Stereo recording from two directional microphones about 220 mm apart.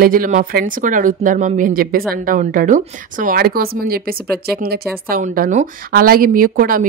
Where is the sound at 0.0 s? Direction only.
40° right (ahead or behind).